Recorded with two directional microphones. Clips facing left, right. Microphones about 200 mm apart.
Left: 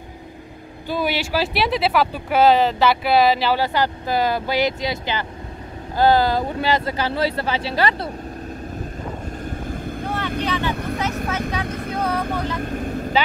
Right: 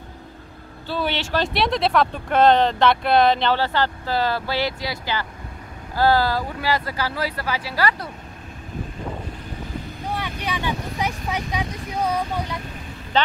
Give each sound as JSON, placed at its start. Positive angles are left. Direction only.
{"t": 0.8, "sound": "speech", "side_deg": 10}
{"t": 9.7, "sound": "vehicle", "side_deg": 50}
{"t": 10.0, "sound": "vehicle", "side_deg": -10}
{"t": 12.0, "sound": "speech", "side_deg": -15}
{"t": 12.7, "sound": "vehicle", "side_deg": 50}